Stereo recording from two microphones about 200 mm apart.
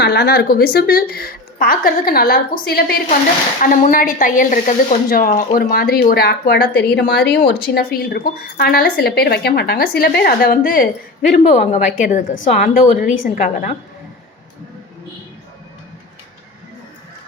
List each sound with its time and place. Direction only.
0.0 s a woman's voice: 55° left (ahead or behind)
11.3 s a woman's voice: 35° left (ahead or behind)